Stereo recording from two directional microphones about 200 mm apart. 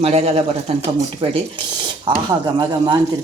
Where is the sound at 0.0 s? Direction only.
30° right (ahead or behind).